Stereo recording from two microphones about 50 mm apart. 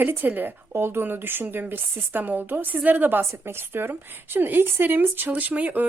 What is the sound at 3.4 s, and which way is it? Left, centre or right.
A woman's voice, right.